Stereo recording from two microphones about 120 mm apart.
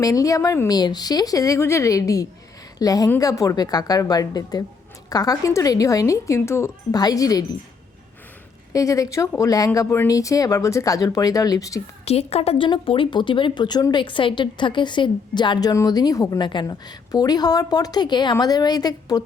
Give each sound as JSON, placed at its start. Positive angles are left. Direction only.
{"t": 0.0, "sound": "a woman's voice", "side_deg": 30}
{"t": 8.7, "sound": "a woman's voice", "side_deg": 30}
{"t": 12.0, "sound": "speech", "side_deg": 60}
{"t": 15.7, "sound": "a woman's voice", "side_deg": 30}